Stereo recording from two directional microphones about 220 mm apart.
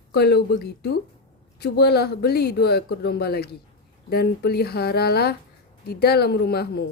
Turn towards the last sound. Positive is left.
turn(degrees=45)  # may be behind; listen again after turning